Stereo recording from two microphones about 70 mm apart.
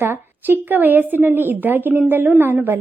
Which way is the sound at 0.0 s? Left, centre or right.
Right.